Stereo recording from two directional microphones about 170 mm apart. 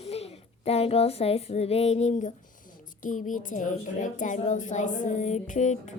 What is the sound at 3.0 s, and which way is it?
Music, 50° left (ahead or behind).